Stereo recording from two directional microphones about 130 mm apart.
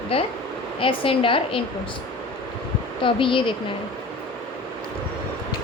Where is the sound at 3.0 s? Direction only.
40° left (ahead or behind).